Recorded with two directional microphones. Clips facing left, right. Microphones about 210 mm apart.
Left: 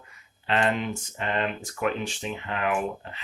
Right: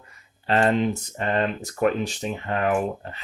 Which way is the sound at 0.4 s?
40° right (ahead or behind).